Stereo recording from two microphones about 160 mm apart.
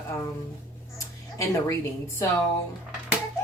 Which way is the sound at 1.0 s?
20° left (ahead or behind).